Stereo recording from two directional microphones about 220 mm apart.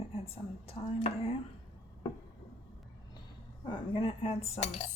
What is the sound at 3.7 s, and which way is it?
Cutlery, 25° left (ahead or behind).